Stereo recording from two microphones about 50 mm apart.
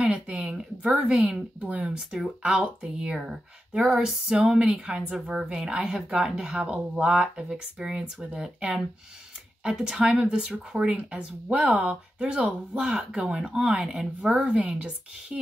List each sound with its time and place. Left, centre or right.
0.0 s speech: centre
2.0 s speech: centre
2.4 s speech: centre
4.6 s speech: right; by 14.3 s centre
14.3 s speech: centre